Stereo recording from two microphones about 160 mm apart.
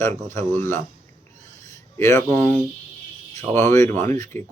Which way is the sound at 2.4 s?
10° left (ahead or behind).